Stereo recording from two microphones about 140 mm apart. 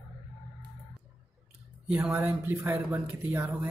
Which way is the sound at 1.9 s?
15° right (ahead or behind).